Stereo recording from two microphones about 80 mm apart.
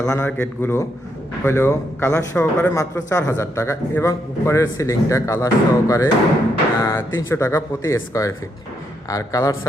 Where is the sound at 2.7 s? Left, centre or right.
Left.